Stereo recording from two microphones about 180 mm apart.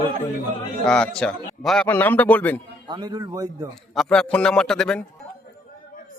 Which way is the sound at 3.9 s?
Centre (ahead or behind).